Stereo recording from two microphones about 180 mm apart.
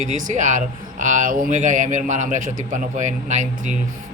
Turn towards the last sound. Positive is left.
turn(degrees=-40)  # may be behind; listen again after turning